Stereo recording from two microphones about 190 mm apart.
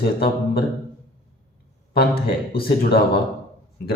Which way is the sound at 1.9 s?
55° left (ahead or behind).